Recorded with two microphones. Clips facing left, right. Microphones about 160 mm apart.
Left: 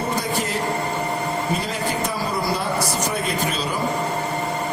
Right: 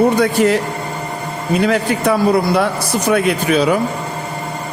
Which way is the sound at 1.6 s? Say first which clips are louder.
Right 9 dB; 75° right (ahead or behind).